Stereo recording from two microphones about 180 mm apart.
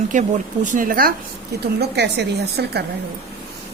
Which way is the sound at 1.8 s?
65° right (ahead or behind).